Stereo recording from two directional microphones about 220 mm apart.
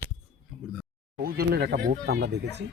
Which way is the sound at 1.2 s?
45° right (ahead or behind).